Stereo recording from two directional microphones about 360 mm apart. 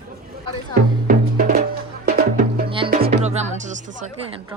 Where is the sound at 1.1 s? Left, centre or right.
Right.